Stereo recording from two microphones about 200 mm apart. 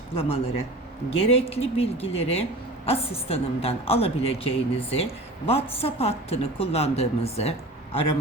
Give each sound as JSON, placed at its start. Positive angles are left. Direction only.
{"t": 0.1, "sound": "a woman's voice", "side_deg": 30}